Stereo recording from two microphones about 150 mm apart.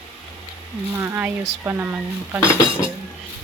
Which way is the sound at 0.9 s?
15° right (ahead or behind).